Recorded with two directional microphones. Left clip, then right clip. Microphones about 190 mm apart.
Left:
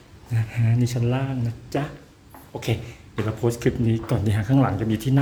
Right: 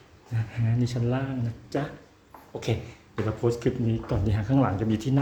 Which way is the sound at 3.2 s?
5° left (ahead or behind).